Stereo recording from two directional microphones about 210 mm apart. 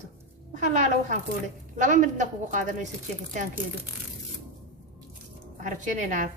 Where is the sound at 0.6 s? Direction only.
35° right (ahead or behind).